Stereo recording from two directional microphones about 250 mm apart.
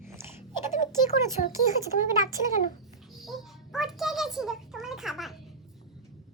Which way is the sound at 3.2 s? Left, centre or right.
Centre.